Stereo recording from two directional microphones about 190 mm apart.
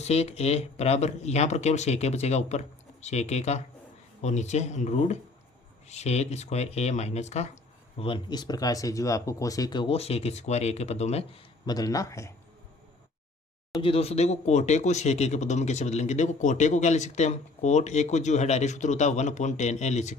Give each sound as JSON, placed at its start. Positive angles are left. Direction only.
{"t": 0.0, "sound": "speech", "side_deg": 35}
{"t": 11.6, "sound": "a man's voice", "side_deg": 20}
{"t": 13.7, "sound": "speech", "side_deg": 30}